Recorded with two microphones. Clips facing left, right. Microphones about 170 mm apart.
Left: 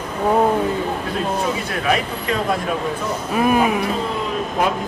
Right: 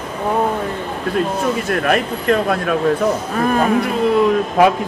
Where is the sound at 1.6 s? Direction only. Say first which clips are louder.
Right 4 dB; 55° right (ahead or behind).